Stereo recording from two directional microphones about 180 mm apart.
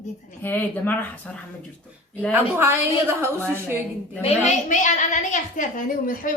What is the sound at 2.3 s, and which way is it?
A woman's voice, 10° right (ahead or behind).